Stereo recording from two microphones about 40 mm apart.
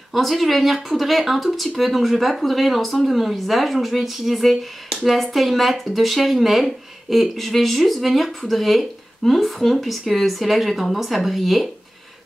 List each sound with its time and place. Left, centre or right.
0.1 s speech: centre